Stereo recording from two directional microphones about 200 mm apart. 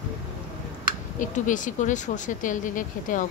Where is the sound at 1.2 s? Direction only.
40° left (ahead or behind).